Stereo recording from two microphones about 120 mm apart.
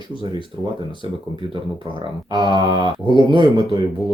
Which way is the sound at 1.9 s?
40° right (ahead or behind).